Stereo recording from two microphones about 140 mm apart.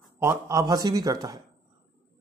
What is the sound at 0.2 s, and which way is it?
A man's voice, 20° right (ahead or behind).